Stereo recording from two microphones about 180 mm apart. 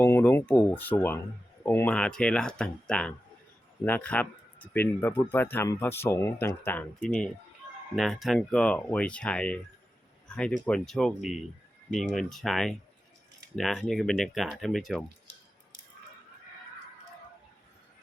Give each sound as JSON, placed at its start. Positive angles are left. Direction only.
{"t": 0.0, "sound": "speech", "side_deg": 10}
{"t": 10.2, "sound": "a sound", "side_deg": 5}
{"t": 10.7, "sound": "speech", "side_deg": 5}